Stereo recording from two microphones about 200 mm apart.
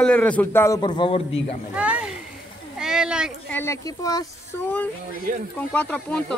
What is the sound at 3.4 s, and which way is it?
A man's voice, 10° left (ahead or behind).